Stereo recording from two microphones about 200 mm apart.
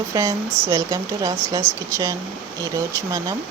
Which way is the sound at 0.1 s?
15° right (ahead or behind).